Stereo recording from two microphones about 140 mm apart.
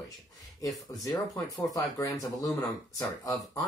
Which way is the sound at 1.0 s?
25° left (ahead or behind).